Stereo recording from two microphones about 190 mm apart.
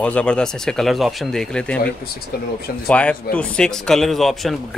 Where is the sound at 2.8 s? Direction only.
5° left (ahead or behind).